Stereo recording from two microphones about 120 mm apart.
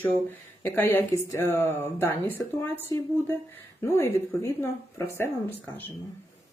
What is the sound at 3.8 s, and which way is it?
Speech, 20° left (ahead or behind).